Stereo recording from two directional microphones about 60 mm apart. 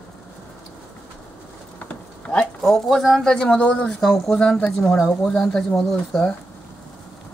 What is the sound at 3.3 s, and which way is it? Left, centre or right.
Speech, centre.